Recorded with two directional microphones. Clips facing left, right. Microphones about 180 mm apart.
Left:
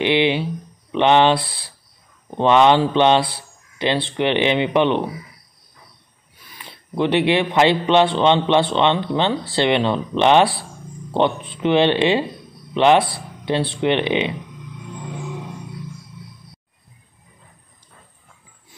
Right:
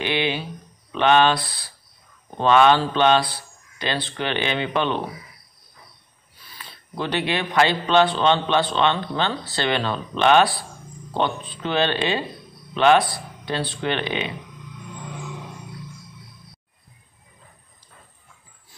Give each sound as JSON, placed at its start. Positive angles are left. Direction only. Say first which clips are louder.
{"t": 0.0, "sound": "speech", "louder": "left 7 dB", "side_deg": 25}
{"t": 6.4, "sound": "speech", "louder": "left 2 dB", "side_deg": 20}